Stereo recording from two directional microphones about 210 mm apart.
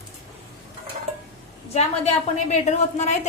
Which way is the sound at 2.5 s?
35° left (ahead or behind).